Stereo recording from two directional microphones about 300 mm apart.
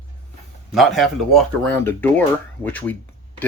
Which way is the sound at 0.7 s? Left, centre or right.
Centre.